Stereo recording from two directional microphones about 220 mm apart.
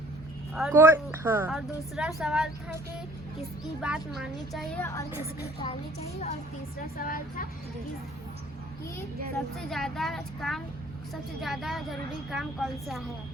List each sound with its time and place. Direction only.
0.7 s a woman's voice: 10° right (ahead or behind)
3.8 s a woman's voice: 5° right (ahead or behind)
5.5 s a child's voice: 25° left (ahead or behind)
6.9 s speech: 40° left (ahead or behind)
9.6 s a woman's voice: centre (ahead or behind)